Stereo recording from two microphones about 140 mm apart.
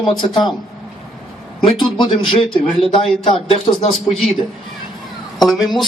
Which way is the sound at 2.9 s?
40° left (ahead or behind).